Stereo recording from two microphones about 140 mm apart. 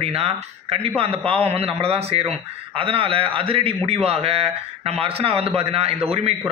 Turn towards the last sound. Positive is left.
turn(degrees=-45)  # may be behind; listen again after turning